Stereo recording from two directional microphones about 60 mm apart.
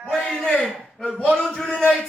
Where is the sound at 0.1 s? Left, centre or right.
Centre.